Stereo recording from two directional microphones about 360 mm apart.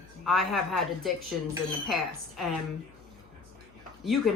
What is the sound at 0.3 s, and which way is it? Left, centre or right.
Speech, centre.